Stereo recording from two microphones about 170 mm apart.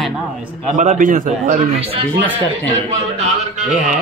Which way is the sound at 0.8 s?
50° right (ahead or behind).